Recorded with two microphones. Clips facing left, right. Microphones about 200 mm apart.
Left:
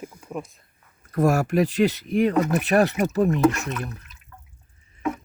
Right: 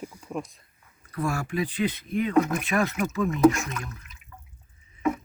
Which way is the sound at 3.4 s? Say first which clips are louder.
Right 1 dB; centre (ahead or behind).